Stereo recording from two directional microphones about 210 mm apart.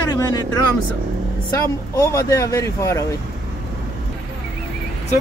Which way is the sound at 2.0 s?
15° left (ahead or behind).